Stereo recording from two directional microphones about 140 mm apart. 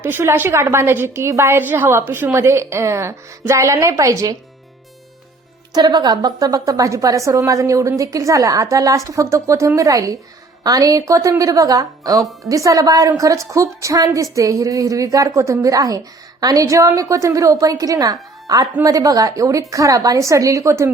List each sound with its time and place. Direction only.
0.0 s a woman's voice: 15° right (ahead or behind)
5.7 s a woman's voice: 30° right (ahead or behind)